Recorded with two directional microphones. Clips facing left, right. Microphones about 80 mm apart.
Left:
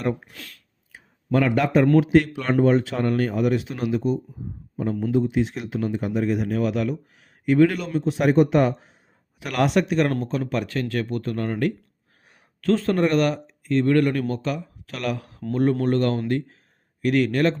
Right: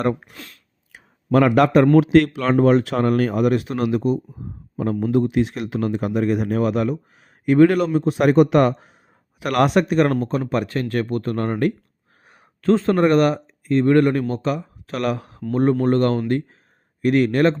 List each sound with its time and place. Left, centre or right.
0.3 s speech: right
0.9 s a sound: right
2.0 s speech: right
4.8 s a man's voice: right
5.1 s speech: right
8.3 s a man's voice: right
9.4 s speech: right
12.2 s a sound: right
12.7 s speech: right
13.0 s speech: right